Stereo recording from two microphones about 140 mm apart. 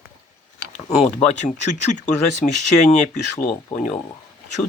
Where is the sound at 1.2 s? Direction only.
55° left (ahead or behind).